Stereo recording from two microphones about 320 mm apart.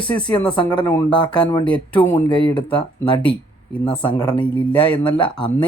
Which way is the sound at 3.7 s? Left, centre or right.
Centre.